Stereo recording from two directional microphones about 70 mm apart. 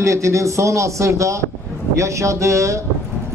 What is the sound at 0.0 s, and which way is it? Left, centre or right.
A man's voice, right.